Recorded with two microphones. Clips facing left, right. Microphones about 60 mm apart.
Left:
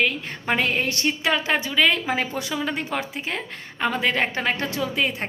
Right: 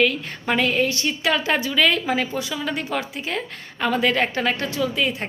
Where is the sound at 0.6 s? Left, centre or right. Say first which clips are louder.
Right 4 dB; left.